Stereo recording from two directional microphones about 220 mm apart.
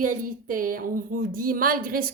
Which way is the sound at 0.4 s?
40° right (ahead or behind).